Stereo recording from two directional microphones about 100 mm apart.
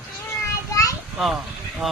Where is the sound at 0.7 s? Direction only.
35° left (ahead or behind).